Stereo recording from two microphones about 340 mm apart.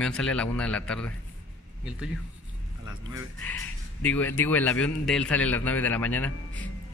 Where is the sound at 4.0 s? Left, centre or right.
Centre.